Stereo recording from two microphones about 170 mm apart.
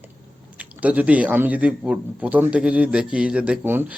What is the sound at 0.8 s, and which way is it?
A man's voice, 10° right (ahead or behind).